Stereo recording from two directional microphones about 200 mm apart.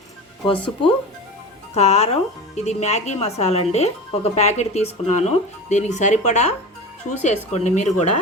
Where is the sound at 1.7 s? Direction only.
30° left (ahead or behind).